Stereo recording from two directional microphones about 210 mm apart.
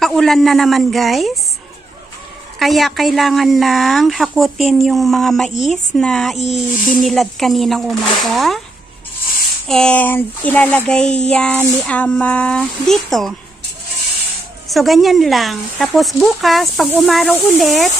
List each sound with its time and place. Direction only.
0.0 s child singing: centre (ahead or behind)
2.6 s child singing: centre (ahead or behind)
5.5 s speech: 35° left (ahead or behind)
5.9 s child singing: 5° left (ahead or behind)
6.3 s speech: 30° left (ahead or behind)
7.0 s child singing: centre (ahead or behind)
9.7 s child singing: 5° left (ahead or behind)
14.7 s child singing: centre (ahead or behind)